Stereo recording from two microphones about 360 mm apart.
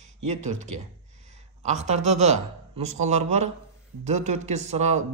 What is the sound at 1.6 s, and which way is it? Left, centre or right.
Speech, centre.